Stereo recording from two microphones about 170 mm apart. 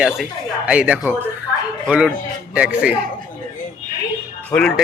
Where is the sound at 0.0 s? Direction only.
5° right (ahead or behind).